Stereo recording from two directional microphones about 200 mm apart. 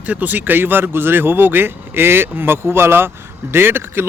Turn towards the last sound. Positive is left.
turn(degrees=-10)  # may be behind; listen again after turning